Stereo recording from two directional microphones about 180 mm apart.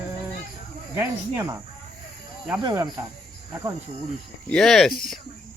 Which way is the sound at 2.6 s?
20° right (ahead or behind).